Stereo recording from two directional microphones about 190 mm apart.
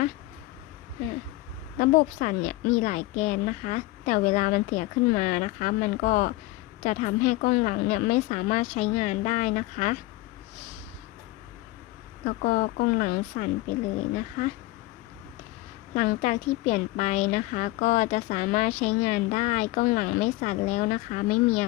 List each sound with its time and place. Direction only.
1.8 s a woman's voice: 45° left (ahead or behind)
12.2 s a woman's voice: 45° left (ahead or behind)
16.0 s a woman's voice: 40° left (ahead or behind)